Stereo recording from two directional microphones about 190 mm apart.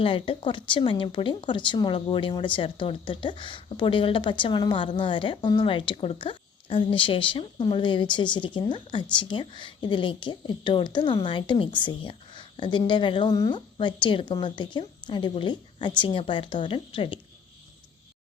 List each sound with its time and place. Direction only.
0.0 s speech: 25° left (ahead or behind)